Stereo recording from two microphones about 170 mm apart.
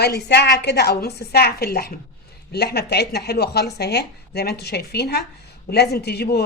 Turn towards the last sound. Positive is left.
turn(degrees=70)  # may be behind; listen again after turning